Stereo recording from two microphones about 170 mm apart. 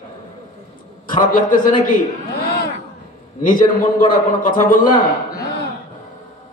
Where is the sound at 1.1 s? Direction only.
55° left (ahead or behind).